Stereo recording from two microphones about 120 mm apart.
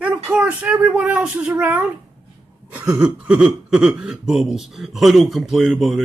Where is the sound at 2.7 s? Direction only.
25° right (ahead or behind).